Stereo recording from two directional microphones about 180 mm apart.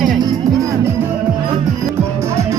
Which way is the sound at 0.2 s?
20° right (ahead or behind).